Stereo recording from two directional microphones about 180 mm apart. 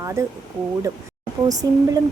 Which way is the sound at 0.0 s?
15° right (ahead or behind).